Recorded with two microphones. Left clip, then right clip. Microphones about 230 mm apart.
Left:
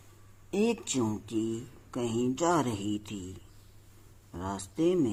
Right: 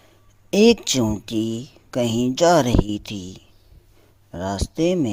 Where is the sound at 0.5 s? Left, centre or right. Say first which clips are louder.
Right 14 dB; right.